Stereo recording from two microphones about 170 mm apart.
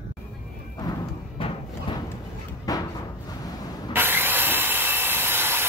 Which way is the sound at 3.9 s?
10° right (ahead or behind).